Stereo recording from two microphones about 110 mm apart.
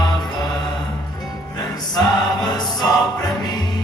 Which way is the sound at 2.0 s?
40° left (ahead or behind).